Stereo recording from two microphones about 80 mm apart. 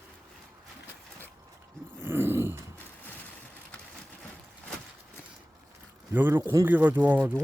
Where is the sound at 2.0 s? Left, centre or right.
Right.